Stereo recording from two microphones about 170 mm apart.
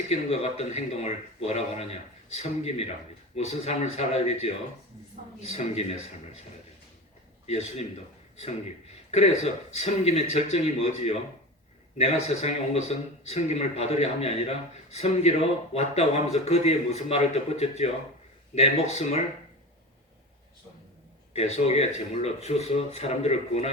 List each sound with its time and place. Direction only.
0.1 s a man's voice: 35° left (ahead or behind)
7.4 s a man's voice: 40° left (ahead or behind)
9.0 s a man's voice: 40° left (ahead or behind)
21.3 s a man's voice: 40° left (ahead or behind)